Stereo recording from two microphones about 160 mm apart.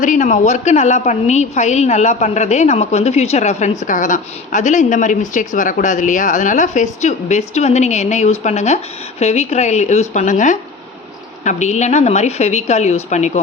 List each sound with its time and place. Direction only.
0.0 s a woman's voice: 50° left (ahead or behind)